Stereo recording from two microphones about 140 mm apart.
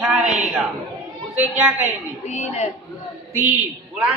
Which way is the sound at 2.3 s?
55° left (ahead or behind).